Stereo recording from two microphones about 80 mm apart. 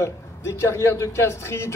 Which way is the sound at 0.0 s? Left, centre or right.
Left.